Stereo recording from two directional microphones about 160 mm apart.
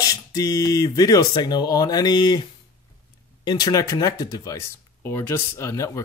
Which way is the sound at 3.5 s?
25° left (ahead or behind).